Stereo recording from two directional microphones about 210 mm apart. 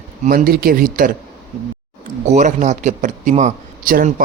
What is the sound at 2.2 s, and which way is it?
A man's voice, 35° right (ahead or behind).